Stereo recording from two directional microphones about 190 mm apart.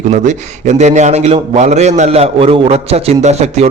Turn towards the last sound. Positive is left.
turn(degrees=-35)  # may be behind; listen again after turning